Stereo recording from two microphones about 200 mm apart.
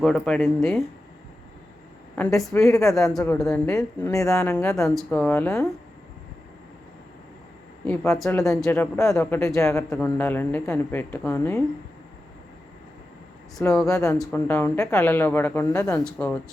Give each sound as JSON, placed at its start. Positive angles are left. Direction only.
{"t": 0.0, "sound": "speech", "side_deg": 5}
{"t": 2.1, "sound": "speech", "side_deg": 5}
{"t": 3.3, "sound": "speech", "side_deg": 0}
{"t": 4.0, "sound": "speech", "side_deg": 15}
{"t": 4.9, "sound": "speech", "side_deg": 5}
{"t": 7.9, "sound": "speech", "side_deg": 15}
{"t": 13.8, "sound": "speech", "side_deg": 15}